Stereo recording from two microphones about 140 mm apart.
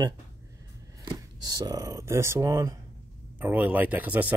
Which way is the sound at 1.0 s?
30° right (ahead or behind).